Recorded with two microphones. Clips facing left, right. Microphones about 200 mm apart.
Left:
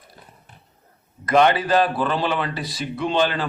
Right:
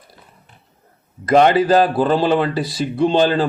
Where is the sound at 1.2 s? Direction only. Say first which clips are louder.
Right 5 dB; 35° right (ahead or behind).